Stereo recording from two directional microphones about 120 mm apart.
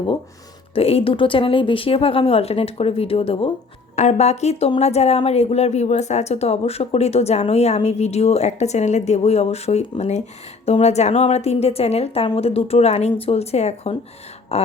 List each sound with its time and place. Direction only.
0.7 s speech: 55° left (ahead or behind)
3.9 s a woman's voice: 70° left (ahead or behind)
14.5 s a sound: 60° left (ahead or behind)